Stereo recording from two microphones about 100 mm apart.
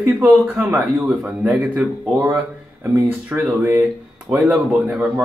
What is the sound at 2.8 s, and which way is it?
Speech, 20° right (ahead or behind).